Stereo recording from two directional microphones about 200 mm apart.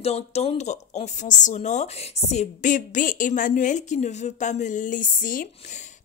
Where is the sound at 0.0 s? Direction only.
30° left (ahead or behind).